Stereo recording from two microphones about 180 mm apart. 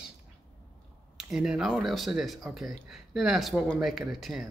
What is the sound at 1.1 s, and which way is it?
A man's voice, centre (ahead or behind).